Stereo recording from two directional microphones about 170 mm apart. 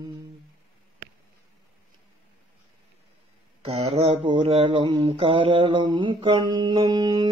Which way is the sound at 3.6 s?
35° right (ahead or behind).